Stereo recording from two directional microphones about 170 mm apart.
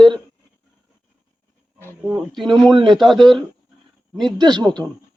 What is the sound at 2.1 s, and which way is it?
Speech, centre (ahead or behind).